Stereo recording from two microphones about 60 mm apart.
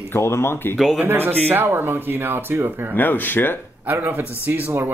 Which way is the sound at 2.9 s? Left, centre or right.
Left.